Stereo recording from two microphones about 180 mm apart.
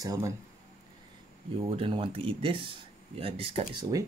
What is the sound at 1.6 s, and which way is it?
Speech, 30° right (ahead or behind).